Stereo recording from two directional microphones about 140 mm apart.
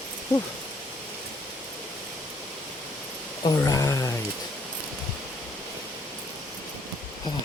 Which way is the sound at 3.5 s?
25° left (ahead or behind).